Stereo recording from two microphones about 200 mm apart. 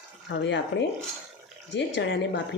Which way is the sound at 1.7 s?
60° left (ahead or behind).